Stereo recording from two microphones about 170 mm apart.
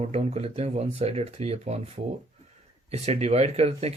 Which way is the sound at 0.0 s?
40° right (ahead or behind).